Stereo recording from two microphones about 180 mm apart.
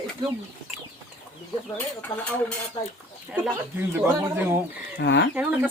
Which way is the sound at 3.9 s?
15° right (ahead or behind).